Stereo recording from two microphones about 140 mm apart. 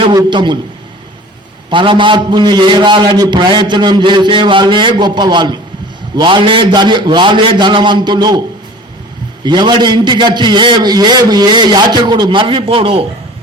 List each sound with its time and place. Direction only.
0.0 s a man's voice: 30° right (ahead or behind)
1.7 s a man's voice: 35° right (ahead or behind)
9.4 s a man's voice: 30° right (ahead or behind)